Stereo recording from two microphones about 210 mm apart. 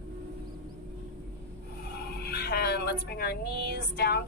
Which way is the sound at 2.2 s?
50° left (ahead or behind).